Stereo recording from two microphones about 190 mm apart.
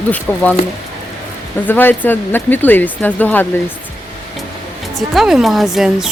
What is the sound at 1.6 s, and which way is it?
Speech, 10° left (ahead or behind).